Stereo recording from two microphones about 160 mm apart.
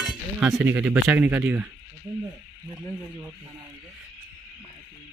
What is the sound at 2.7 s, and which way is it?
Speech, 5° right (ahead or behind).